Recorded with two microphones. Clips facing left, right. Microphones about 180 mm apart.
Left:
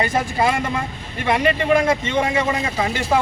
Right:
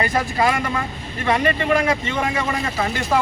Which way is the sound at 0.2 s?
20° left (ahead or behind).